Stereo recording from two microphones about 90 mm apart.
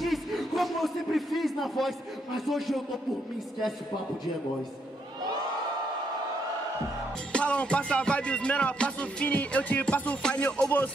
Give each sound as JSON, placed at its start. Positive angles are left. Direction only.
{"t": 0.0, "sound": "a sound", "side_deg": 0}
{"t": 1.6, "sound": "a man's voice", "side_deg": 0}
{"t": 7.3, "sound": "music", "side_deg": 15}